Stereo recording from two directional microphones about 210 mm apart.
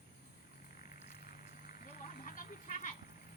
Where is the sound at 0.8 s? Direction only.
40° left (ahead or behind).